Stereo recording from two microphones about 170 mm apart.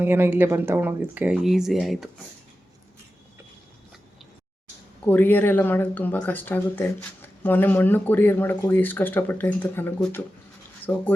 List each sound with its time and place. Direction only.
0.0 s speech: 15° right (ahead or behind)
5.0 s speech: 10° left (ahead or behind)